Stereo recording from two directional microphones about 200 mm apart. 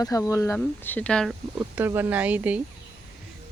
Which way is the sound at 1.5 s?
10° right (ahead or behind).